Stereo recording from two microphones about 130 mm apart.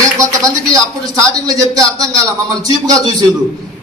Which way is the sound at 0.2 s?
25° right (ahead or behind).